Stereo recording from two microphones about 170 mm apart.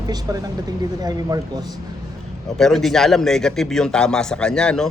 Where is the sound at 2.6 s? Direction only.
Centre (ahead or behind).